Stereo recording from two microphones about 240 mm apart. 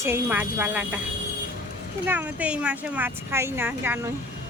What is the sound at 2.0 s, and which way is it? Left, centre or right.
Speech, centre.